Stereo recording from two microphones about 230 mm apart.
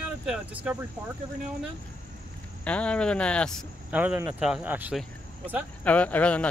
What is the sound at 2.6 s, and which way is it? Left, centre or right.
Speech, centre.